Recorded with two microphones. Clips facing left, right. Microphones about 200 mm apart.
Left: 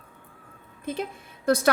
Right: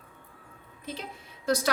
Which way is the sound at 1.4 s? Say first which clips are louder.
Left 5 dB; 55° left (ahead or behind).